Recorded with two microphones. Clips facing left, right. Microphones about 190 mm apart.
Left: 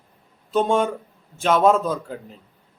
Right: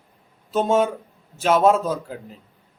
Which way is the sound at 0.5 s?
5° right (ahead or behind).